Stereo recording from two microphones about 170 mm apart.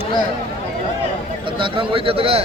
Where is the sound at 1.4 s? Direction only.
30° right (ahead or behind).